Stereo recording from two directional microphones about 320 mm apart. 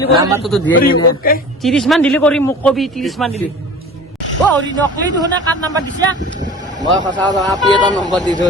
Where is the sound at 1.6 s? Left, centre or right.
Centre.